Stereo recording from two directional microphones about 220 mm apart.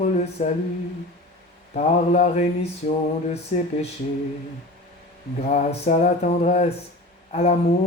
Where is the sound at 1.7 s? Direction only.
30° left (ahead or behind).